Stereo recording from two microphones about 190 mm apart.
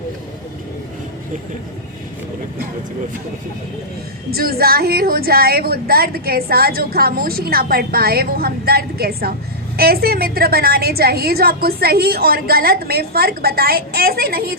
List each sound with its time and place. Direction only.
4.3 s a woman's voice: 55° right (ahead or behind)